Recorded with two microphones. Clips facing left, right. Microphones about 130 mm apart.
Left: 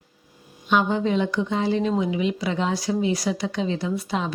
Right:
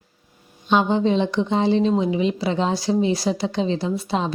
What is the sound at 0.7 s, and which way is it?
A woman's voice, 25° right (ahead or behind).